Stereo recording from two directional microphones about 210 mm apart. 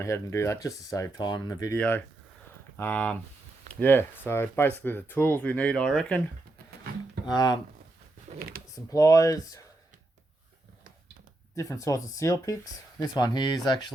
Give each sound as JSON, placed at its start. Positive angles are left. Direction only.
{"t": 0.0, "sound": "speech", "side_deg": 15}
{"t": 7.3, "sound": "speech", "side_deg": 20}
{"t": 8.4, "sound": "speech", "side_deg": -45}
{"t": 8.7, "sound": "speech", "side_deg": 15}
{"t": 11.5, "sound": "speech", "side_deg": 15}